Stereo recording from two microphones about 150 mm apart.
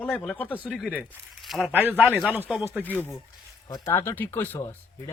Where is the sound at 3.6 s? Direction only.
30° left (ahead or behind).